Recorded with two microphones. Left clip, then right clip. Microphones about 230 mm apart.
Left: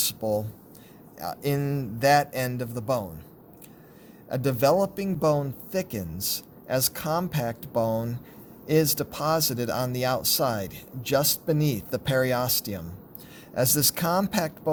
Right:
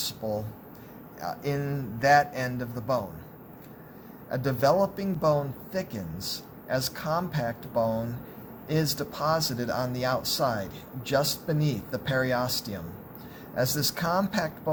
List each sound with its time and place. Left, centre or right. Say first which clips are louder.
0.0 s speech: left 5 dB; left
4.3 s speech: left 2 dB; left